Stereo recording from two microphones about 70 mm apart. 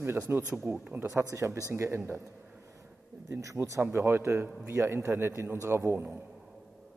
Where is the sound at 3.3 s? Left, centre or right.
Right.